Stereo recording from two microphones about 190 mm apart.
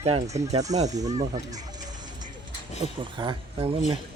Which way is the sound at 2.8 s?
25° right (ahead or behind).